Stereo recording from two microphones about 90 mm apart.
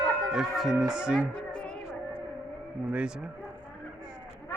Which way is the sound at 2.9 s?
10° right (ahead or behind).